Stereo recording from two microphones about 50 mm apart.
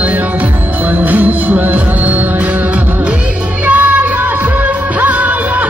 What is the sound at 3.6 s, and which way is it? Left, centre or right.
Music, right.